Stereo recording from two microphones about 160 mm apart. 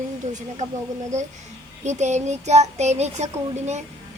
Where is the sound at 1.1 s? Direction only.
50° right (ahead or behind).